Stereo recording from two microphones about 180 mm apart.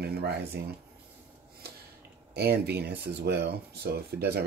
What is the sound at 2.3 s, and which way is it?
Speech, 65° right (ahead or behind).